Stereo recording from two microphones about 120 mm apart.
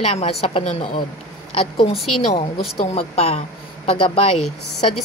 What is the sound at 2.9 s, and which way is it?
A woman's voice, 60° left (ahead or behind).